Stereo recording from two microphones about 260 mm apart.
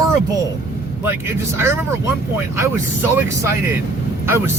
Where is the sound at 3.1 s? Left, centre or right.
Centre.